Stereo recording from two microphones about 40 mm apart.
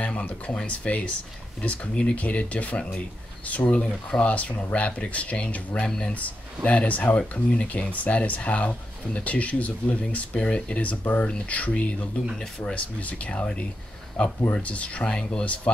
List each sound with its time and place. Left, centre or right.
0.0 s speech: left